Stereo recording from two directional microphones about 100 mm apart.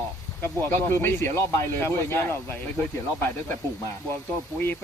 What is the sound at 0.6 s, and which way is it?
Speech, 25° left (ahead or behind).